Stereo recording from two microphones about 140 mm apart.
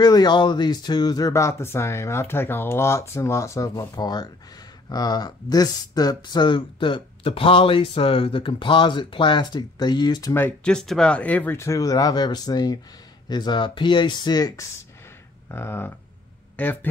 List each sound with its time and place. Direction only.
0.0 s speech: 30° left (ahead or behind)
10.3 s speech: 10° left (ahead or behind); by 14.7 s 30° left (ahead or behind)
15.4 s a sound: 15° left (ahead or behind)
16.5 s speech: 15° left (ahead or behind)